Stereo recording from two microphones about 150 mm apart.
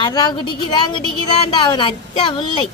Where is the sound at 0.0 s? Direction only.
30° left (ahead or behind).